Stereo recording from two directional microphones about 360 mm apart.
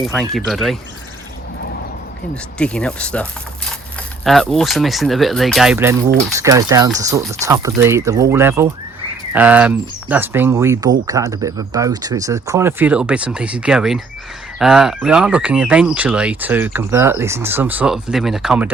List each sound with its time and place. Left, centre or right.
0.0 s speech: centre
2.3 s speech: centre